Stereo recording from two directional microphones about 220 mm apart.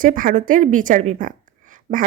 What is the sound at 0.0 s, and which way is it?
Speech, 40° right (ahead or behind).